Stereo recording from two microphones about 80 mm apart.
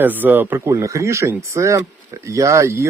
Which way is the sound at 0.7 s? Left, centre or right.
Right.